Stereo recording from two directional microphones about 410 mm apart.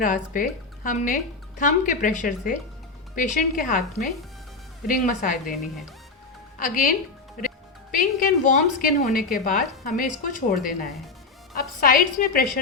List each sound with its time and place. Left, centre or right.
0.0 s speech: centre
4.9 s speech: centre
6.6 s speech: centre